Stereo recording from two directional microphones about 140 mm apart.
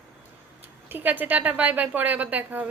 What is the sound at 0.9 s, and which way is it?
A woman's voice, 15° right (ahead or behind).